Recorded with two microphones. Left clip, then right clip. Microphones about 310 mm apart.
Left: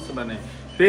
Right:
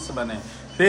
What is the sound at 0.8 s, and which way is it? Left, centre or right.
Speech, right.